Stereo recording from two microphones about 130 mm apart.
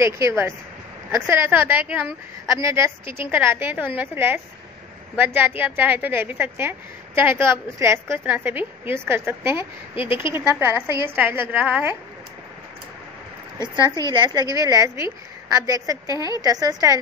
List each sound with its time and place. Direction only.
0.0 s a woman's voice: 20° right (ahead or behind)
9.9 s speech: 40° left (ahead or behind)
10.3 s a woman's voice: 20° right (ahead or behind)
14.1 s a woman's voice: 35° right (ahead or behind)